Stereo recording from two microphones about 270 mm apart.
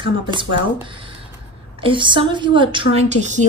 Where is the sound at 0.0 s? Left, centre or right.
Centre.